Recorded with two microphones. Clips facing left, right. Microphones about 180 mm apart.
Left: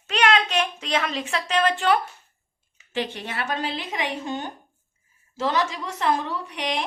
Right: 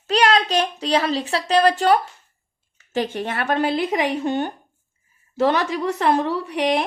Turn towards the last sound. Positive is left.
turn(degrees=-60)  # may be behind; listen again after turning